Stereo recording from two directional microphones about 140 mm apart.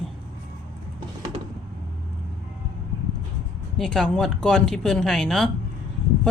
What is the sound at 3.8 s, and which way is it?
Speech, 5° left (ahead or behind).